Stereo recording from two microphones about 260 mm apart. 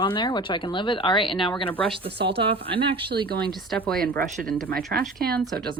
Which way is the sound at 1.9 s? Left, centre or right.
Right.